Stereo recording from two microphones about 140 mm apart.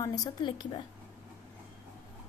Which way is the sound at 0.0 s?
25° left (ahead or behind).